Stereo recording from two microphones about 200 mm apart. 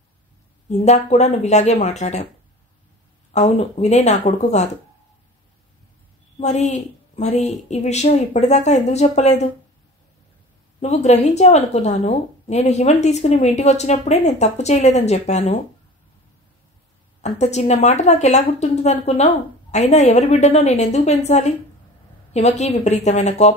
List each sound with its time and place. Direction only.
0.7 s a woman's voice: 35° left (ahead or behind)
3.3 s a woman's voice: 35° left (ahead or behind)
6.4 s a woman's voice: 35° left (ahead or behind)
10.8 s a woman's voice: 35° left (ahead or behind)
17.2 s a woman's voice: 35° left (ahead or behind)